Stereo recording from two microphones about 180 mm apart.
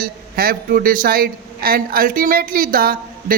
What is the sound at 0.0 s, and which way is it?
Speech, 55° right (ahead or behind).